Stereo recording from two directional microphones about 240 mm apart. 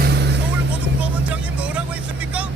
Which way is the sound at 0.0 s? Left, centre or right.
Right.